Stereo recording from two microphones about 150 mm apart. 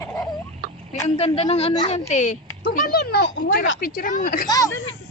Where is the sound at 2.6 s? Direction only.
85° left.